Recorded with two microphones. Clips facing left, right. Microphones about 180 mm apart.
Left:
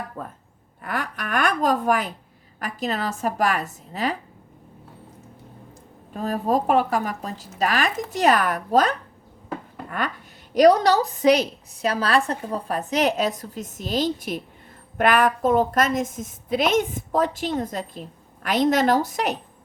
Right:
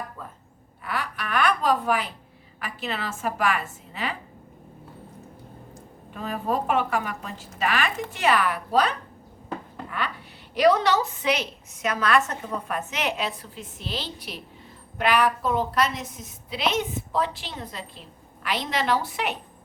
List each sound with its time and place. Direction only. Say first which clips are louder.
0.2 s a woman's voice: left 6 dB; 45° left (ahead or behind)
6.1 s a woman's voice: left 5 dB; 40° left (ahead or behind)
10.5 s a woman's voice: left 4 dB; 40° left (ahead or behind)